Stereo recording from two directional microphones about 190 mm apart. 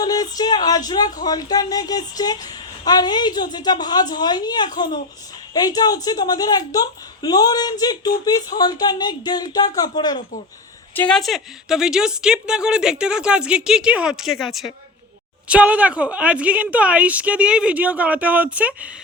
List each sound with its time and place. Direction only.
0.0 s a woman's voice: 20° left (ahead or behind)
10.9 s a woman's voice: 5° left (ahead or behind)